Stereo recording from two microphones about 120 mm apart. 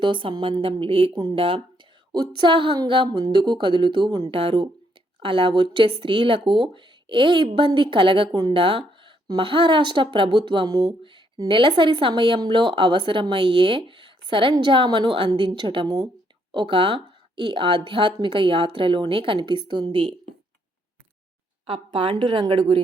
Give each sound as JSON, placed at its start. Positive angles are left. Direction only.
{"t": 0.0, "sound": "speech", "side_deg": -45}
{"t": 10.7, "sound": "speech", "side_deg": -30}
{"t": 11.4, "sound": "speech", "side_deg": -45}
{"t": 21.7, "sound": "speech", "side_deg": -45}